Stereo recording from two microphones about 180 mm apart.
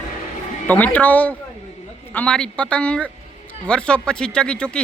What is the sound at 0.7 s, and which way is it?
A woman's voice, 10° left (ahead or behind).